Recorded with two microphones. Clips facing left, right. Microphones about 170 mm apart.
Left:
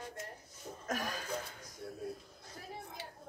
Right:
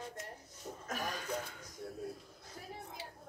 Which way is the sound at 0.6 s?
5° right (ahead or behind).